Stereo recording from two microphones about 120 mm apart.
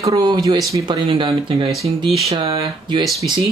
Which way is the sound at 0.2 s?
40° right (ahead or behind).